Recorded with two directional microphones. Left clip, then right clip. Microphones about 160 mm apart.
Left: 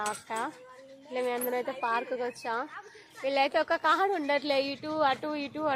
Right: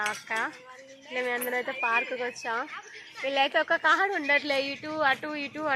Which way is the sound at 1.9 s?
15° left (ahead or behind).